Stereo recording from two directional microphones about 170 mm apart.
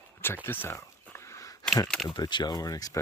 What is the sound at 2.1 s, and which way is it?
Speech, 25° left (ahead or behind).